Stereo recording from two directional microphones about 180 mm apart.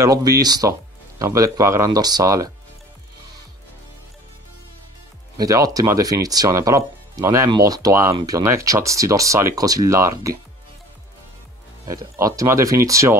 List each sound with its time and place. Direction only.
0.0 s speech: 20° right (ahead or behind)
5.4 s speech: 20° right (ahead or behind)
11.9 s speech: 20° right (ahead or behind)